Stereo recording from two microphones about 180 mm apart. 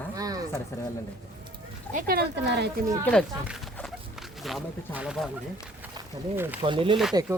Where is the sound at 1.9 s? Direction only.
55° right (ahead or behind).